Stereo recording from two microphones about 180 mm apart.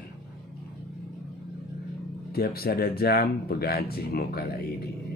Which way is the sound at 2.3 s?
60° left (ahead or behind).